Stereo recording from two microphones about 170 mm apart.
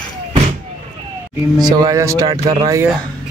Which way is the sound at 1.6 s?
20° right (ahead or behind).